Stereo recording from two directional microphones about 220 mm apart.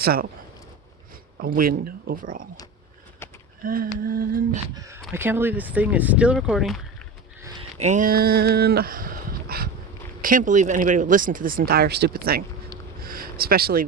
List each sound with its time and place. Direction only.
0.0 s speech: 45° right (ahead or behind)
1.4 s speech: 40° right (ahead or behind)
3.2 s a sound: 10° left (ahead or behind)
3.6 s speech: 40° right (ahead or behind)
4.7 s speech: 15° right (ahead or behind); by 6.8 s centre (ahead or behind)
7.8 s speech: 35° right (ahead or behind)
13.0 s a sound: 40° right (ahead or behind)